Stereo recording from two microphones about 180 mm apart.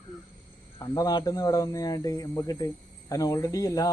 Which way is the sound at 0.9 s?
20° left (ahead or behind).